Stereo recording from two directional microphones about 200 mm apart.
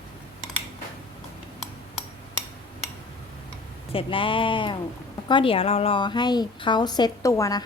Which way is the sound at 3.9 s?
25° left (ahead or behind).